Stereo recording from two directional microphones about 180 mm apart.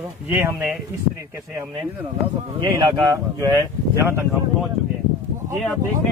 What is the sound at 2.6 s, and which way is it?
Speech, 25° right (ahead or behind).